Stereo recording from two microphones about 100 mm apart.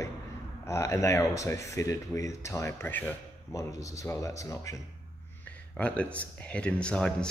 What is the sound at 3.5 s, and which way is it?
Speech, 35° left (ahead or behind).